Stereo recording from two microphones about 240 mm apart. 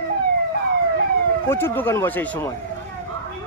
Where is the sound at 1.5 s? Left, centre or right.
Centre.